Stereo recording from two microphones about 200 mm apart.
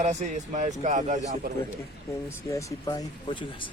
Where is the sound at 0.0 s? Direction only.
35° right (ahead or behind).